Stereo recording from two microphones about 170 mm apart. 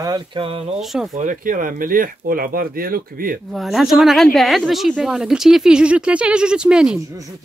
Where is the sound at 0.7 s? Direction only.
Centre (ahead or behind).